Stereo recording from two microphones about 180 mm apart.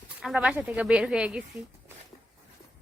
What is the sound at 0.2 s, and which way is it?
Speech, centre (ahead or behind).